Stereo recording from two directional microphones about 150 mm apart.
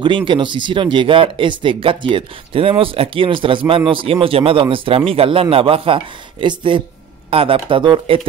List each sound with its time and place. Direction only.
0.0 s speech: 30° right (ahead or behind)